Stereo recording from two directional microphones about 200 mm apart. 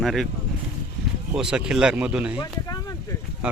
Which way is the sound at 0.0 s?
Centre (ahead or behind).